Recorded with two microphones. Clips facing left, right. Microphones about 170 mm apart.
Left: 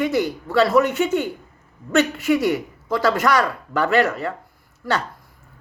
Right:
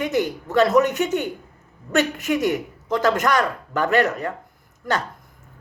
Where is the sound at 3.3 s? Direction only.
20° right (ahead or behind).